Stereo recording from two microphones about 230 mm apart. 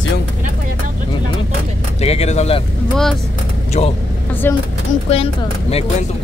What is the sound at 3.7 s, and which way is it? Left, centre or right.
Speech, left.